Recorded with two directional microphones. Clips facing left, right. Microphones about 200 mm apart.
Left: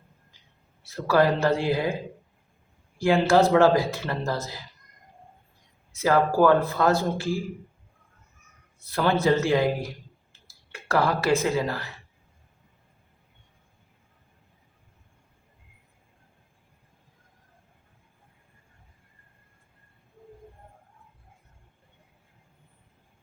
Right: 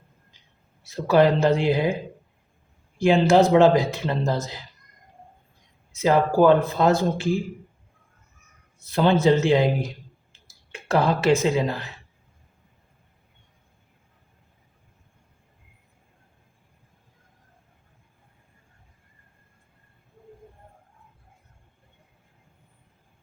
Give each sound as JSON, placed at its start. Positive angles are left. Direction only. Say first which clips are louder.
{"t": 0.9, "sound": "speech", "louder": "right 3 dB", "side_deg": -20}
{"t": 3.0, "sound": "speech", "louder": "right 3 dB", "side_deg": -20}
{"t": 6.0, "sound": "speech", "louder": "right 2 dB", "side_deg": -20}
{"t": 8.9, "sound": "speech", "louder": "right 4 dB", "side_deg": -20}